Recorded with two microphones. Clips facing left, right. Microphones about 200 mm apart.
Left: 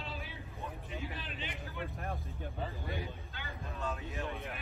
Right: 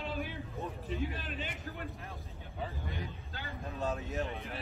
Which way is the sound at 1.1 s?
45° right (ahead or behind).